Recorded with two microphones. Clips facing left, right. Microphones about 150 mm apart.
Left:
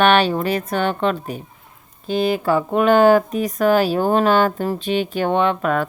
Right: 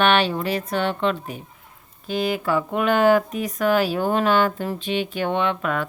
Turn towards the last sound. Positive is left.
turn(degrees=40)  # may be behind; listen again after turning